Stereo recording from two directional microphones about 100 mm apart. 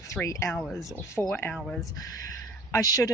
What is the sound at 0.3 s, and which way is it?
Speech, 30° left (ahead or behind).